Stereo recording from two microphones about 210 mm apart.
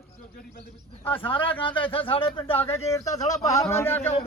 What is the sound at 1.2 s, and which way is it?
A man's voice, 25° left (ahead or behind).